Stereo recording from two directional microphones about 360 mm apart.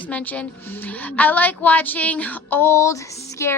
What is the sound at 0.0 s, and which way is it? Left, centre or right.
A woman's voice, centre.